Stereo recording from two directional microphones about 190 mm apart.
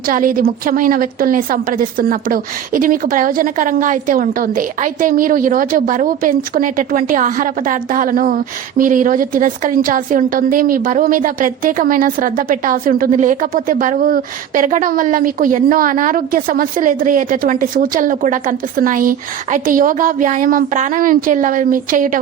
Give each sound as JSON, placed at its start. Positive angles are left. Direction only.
{"t": 0.1, "sound": "a woman's voice", "side_deg": -45}